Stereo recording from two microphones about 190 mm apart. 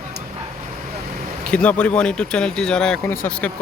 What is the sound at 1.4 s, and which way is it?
Speech, 5° left (ahead or behind).